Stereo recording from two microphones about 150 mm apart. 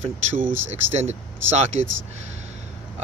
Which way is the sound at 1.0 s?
50° right (ahead or behind).